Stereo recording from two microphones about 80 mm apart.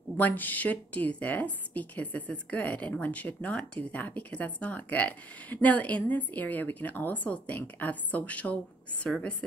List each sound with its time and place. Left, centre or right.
0.2 s a woman's voice: left